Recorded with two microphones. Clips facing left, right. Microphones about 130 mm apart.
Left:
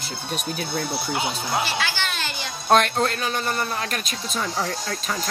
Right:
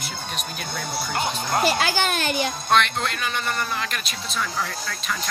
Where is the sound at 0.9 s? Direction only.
5° left (ahead or behind).